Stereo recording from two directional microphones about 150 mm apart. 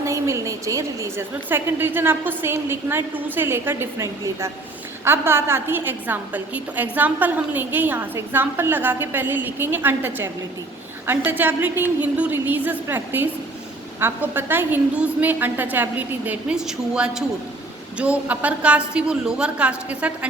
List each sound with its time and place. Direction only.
0.0 s a woman's voice: 20° right (ahead or behind)